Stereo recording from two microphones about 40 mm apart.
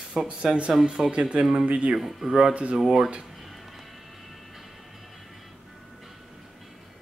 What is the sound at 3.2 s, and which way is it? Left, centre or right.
Music, centre.